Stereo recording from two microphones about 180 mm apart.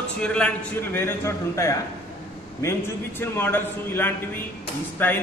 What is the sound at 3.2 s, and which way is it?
A man's voice, 10° left (ahead or behind).